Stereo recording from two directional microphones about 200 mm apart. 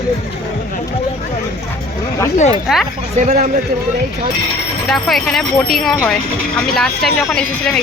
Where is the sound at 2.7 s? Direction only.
Centre (ahead or behind).